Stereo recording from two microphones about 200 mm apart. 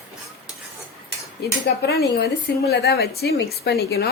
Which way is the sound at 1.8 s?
55° left (ahead or behind).